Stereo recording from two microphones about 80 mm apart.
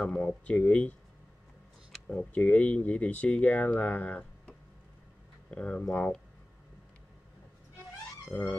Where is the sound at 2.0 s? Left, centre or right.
Centre.